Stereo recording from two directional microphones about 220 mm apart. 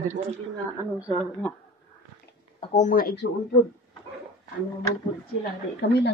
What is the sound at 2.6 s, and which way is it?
Speech, 35° left (ahead or behind).